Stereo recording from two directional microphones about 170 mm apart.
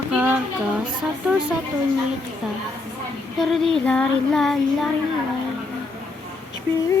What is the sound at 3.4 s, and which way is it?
Speech, centre (ahead or behind).